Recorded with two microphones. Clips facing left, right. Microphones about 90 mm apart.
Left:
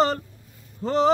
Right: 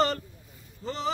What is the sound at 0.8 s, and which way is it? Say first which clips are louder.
Speech: left 11 dB; 55° left (ahead or behind).